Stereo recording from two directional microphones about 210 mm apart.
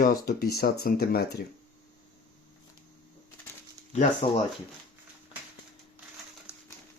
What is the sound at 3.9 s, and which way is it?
Speech, 35° left (ahead or behind).